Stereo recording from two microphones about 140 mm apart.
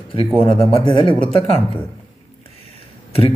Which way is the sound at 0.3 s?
40° left (ahead or behind).